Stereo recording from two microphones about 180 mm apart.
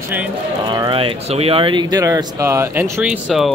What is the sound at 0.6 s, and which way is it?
Speech, 25° right (ahead or behind).